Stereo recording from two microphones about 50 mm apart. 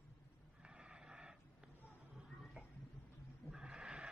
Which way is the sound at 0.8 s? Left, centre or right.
Centre.